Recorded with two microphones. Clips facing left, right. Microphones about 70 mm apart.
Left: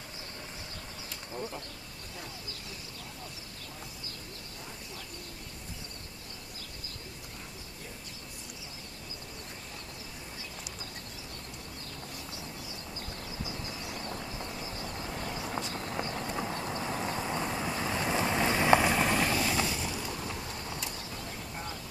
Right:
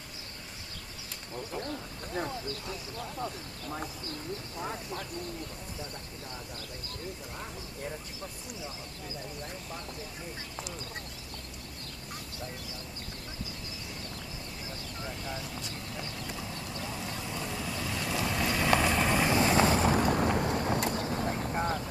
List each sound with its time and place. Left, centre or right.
2.1 s speech: right
15.4 s clip-clop: left
18.8 s vehicle: centre
19.0 s vehicle: centre
19.3 s vehicle: right
19.7 s vehicle: right